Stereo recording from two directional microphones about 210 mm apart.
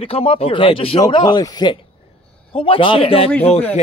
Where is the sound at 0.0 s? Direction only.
25° left (ahead or behind).